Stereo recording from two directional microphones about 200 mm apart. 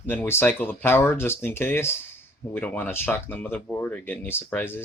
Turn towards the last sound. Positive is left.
turn(degrees=10)  # may be behind; listen again after turning